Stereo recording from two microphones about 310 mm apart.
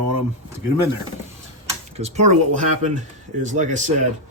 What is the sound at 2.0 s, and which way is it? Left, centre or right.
Speech, right.